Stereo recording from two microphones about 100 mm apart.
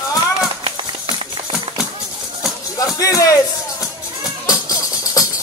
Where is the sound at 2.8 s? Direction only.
35° left (ahead or behind).